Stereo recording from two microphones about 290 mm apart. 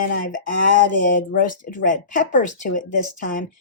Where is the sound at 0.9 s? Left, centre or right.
Left.